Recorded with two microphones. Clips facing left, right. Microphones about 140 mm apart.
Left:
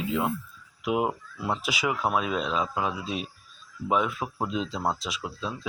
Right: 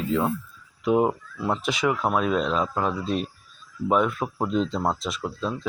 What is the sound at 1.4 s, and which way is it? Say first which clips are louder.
Speech: right 4 dB; 5° left (ahead or behind).